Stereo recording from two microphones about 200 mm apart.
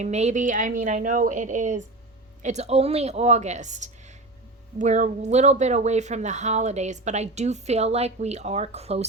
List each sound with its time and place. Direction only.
0.0 s speech: 35° right (ahead or behind)